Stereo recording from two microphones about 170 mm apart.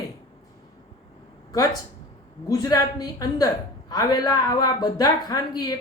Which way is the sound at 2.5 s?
20° left (ahead or behind).